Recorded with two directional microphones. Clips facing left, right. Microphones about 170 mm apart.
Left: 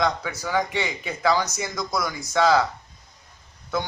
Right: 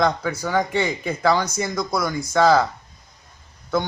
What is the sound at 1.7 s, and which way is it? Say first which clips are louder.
Speech: right 3 dB; 25° right (ahead or behind).